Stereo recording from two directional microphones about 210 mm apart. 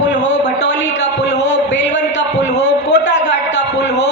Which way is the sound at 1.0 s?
55° left (ahead or behind).